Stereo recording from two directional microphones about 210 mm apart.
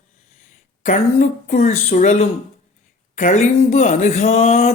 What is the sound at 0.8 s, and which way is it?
A man's voice, 35° left (ahead or behind).